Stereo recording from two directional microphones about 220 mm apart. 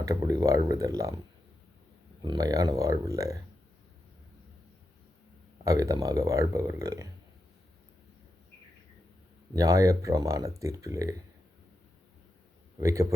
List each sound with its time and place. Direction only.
0.0 s speech: 15° right (ahead or behind)
2.2 s speech: 20° right (ahead or behind)
5.6 s speech: 15° right (ahead or behind)
9.5 s speech: 15° right (ahead or behind)
12.8 s speech: 15° right (ahead or behind)